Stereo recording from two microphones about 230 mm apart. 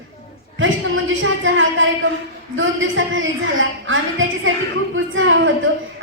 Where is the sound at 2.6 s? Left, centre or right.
Right.